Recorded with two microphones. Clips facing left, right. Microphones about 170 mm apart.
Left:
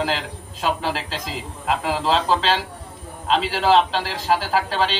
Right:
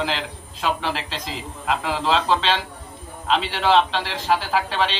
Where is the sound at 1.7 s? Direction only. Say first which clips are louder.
Left 1 dB; 5° left (ahead or behind).